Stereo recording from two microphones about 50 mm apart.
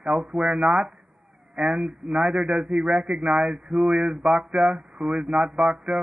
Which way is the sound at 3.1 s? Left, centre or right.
Right.